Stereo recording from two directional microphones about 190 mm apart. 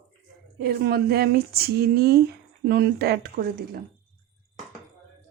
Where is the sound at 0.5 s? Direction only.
55° right (ahead or behind).